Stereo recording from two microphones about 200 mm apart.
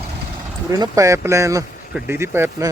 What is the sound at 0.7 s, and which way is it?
A man's voice, 15° right (ahead or behind).